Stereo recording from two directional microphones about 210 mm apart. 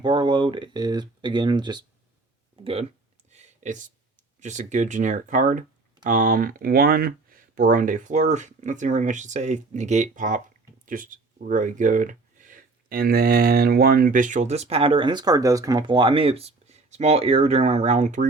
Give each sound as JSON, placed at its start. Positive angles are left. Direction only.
{"t": 0.0, "sound": "speech", "side_deg": -20}
{"t": 3.2, "sound": "a sound", "side_deg": -35}
{"t": 4.4, "sound": "speech", "side_deg": -35}